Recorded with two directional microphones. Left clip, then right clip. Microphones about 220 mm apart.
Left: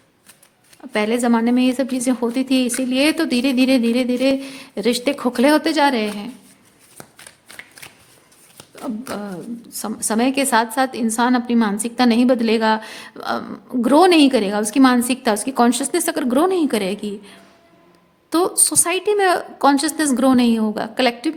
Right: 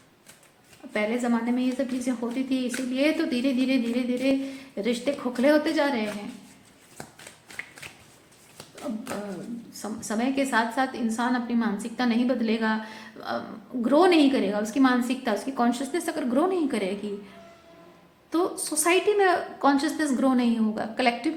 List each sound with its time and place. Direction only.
0.9 s a woman's voice: 55° left (ahead or behind)
9.8 s a woman's voice: 55° left (ahead or behind)